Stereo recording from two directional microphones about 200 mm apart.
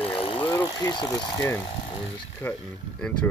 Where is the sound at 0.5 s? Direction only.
20° left (ahead or behind).